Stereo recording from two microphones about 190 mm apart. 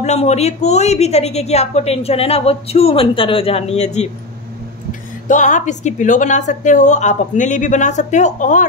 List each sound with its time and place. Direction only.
0.0 s a woman's voice: 35° left (ahead or behind)
5.3 s a woman's voice: 40° left (ahead or behind)